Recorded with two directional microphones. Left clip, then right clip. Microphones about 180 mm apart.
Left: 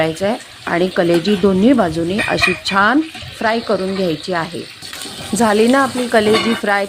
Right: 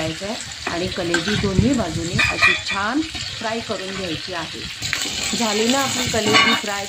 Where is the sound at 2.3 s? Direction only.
50° left (ahead or behind).